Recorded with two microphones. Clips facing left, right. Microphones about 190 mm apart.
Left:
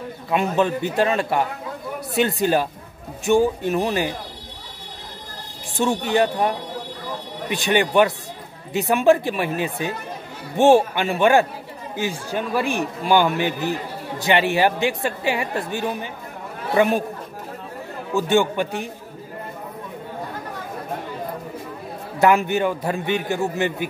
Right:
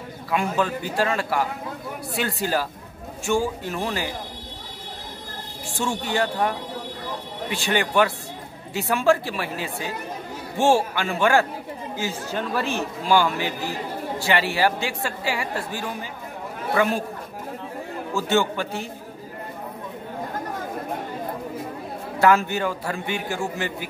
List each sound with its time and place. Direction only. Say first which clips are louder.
0.3 s speech: left 4 dB; 20° left (ahead or behind)
5.8 s speech: left 5 dB; 20° left (ahead or behind)
18.1 s speech: left 4 dB; 15° left (ahead or behind)
22.2 s speech: left 2 dB; 20° left (ahead or behind)